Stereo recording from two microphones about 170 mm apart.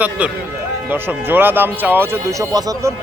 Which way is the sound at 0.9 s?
10° right (ahead or behind).